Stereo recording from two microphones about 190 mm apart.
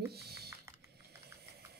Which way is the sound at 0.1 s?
55° right (ahead or behind).